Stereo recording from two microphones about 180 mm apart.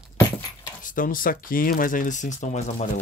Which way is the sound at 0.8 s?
50° left (ahead or behind).